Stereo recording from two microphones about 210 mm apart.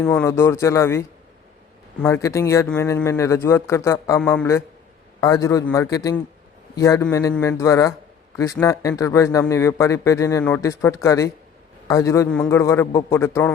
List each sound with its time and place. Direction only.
0.0 s a man's voice: 10° left (ahead or behind)